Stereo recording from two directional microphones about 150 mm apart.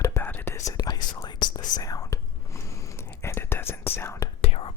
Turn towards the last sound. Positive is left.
turn(degrees=40)  # may be behind; listen again after turning